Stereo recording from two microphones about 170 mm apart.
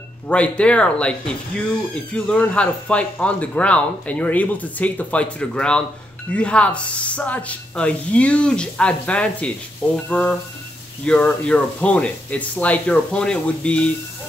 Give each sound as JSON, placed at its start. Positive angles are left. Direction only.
{"t": 0.3, "sound": "speech", "side_deg": 5}